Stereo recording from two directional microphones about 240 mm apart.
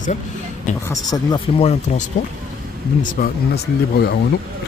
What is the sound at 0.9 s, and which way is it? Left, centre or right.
Speech, centre.